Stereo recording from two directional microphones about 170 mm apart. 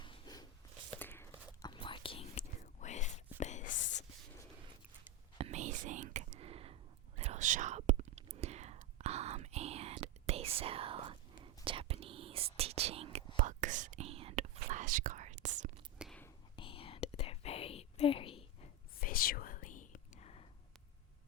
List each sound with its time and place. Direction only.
0.0 s a sound: 25° left (ahead or behind)
0.9 s whispering: 10° left (ahead or behind)
1.6 s whispering: 30° left (ahead or behind); by 3.7 s 45° left (ahead or behind)
3.7 s whispering: 90° left
5.4 s whispering: 40° right (ahead or behind)
14.7 s whispering: 50° right (ahead or behind)
16.0 s whispering: 5° right (ahead or behind)
16.6 s whispering: 30° left (ahead or behind)
18.9 s whispering: 60° left (ahead or behind); by 20.4 s 40° left (ahead or behind)